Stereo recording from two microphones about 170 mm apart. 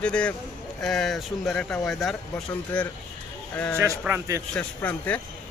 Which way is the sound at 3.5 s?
10° left (ahead or behind).